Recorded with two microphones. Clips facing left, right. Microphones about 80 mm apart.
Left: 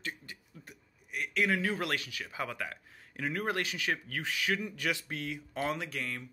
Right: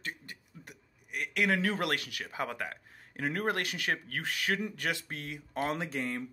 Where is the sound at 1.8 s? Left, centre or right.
Right.